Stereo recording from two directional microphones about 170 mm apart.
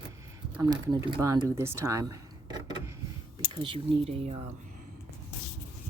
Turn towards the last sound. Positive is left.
turn(degrees=-35)  # may be behind; listen again after turning